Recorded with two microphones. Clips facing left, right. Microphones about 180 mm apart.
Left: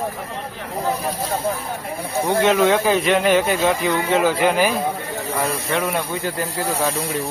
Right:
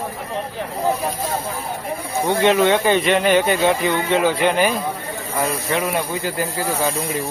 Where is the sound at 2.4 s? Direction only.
Centre (ahead or behind).